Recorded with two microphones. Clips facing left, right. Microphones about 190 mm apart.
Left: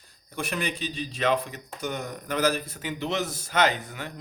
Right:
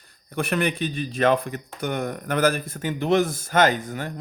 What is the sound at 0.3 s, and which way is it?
Speech, 60° right (ahead or behind).